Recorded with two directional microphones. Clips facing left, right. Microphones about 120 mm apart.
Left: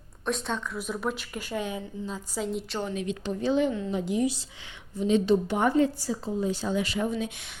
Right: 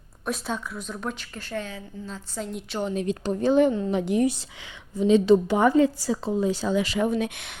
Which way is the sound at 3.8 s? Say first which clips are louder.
Right 4 dB; 65° right (ahead or behind).